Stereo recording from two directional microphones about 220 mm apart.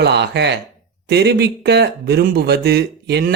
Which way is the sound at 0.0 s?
50° right (ahead or behind).